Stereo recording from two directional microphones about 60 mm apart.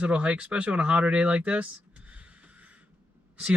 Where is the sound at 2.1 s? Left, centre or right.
Right.